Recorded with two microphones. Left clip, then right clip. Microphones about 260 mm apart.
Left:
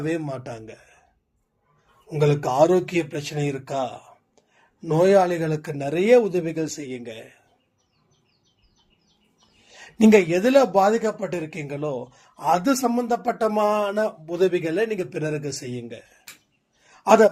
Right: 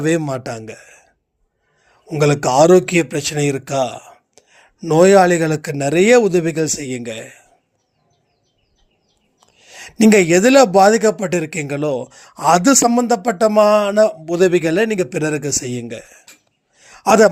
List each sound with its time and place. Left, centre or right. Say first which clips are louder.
0.0 s a man's voice: right 9 dB; right
9.6 s speech: right 5 dB; right
16.8 s a sound: right 4 dB; right